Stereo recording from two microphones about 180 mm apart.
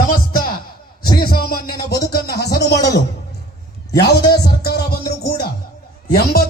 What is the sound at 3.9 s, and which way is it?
A man's voice, 65° left (ahead or behind).